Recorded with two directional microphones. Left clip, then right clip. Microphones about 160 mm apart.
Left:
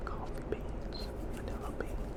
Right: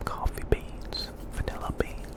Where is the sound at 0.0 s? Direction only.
45° right (ahead or behind).